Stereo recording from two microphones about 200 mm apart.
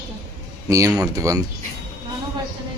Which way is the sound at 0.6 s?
15° right (ahead or behind).